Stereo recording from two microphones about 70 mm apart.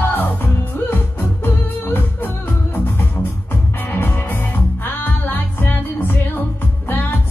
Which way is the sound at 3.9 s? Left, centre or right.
Left.